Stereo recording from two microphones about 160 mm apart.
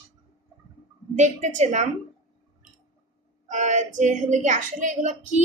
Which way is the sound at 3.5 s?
50° right (ahead or behind).